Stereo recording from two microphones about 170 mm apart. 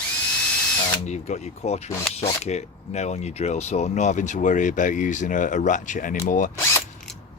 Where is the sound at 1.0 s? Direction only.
40° left (ahead or behind).